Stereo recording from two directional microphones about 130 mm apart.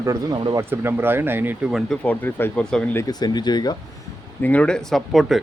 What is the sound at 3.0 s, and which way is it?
Speech, 30° left (ahead or behind).